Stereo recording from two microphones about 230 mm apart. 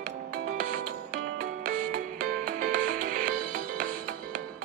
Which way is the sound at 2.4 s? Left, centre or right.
Right.